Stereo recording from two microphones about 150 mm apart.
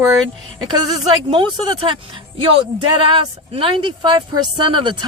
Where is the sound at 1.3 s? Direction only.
35° right (ahead or behind).